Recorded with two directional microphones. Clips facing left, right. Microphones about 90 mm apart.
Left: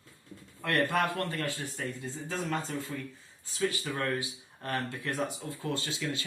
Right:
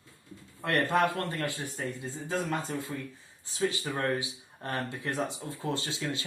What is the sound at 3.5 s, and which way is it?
Speech, 25° right (ahead or behind).